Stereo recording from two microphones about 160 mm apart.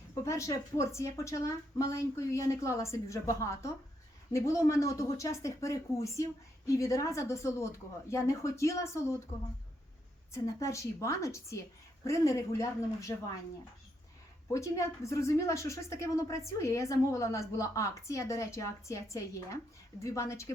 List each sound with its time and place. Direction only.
0.1 s speech: 20° left (ahead or behind)
10.3 s speech: 20° left (ahead or behind)
14.5 s speech: 20° left (ahead or behind)